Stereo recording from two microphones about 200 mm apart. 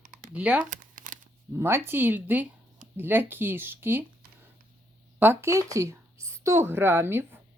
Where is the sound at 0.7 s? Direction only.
40° right (ahead or behind).